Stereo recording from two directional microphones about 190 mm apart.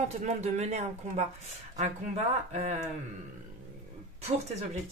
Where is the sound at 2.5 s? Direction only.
35° right (ahead or behind).